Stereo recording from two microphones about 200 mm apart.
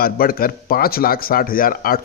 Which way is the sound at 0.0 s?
45° left (ahead or behind).